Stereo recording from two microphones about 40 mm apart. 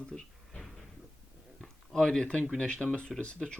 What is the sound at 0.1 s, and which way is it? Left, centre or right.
Cupboard open or close, centre.